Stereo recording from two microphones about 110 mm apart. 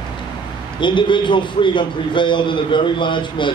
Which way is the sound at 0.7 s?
45° left (ahead or behind).